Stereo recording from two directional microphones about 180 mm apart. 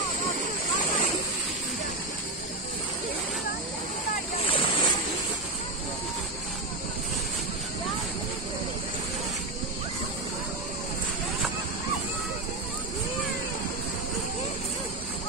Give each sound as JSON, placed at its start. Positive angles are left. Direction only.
{"t": 4.5, "sound": "waves", "side_deg": 30}